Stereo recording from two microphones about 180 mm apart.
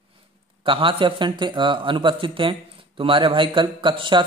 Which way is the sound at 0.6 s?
30° right (ahead or behind).